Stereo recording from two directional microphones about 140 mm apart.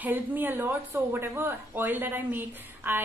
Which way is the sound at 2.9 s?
20° right (ahead or behind).